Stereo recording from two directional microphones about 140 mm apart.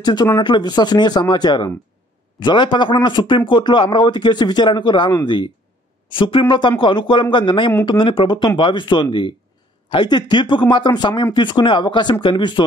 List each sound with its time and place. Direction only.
0.0 s speech: 30° left (ahead or behind)
6.1 s speech: 35° left (ahead or behind)